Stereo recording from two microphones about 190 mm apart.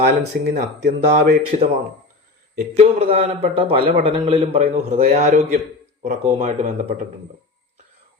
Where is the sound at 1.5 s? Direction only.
35° right (ahead or behind).